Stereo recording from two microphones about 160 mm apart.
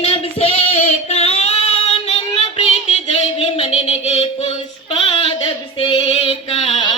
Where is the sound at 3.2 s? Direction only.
35° left (ahead or behind).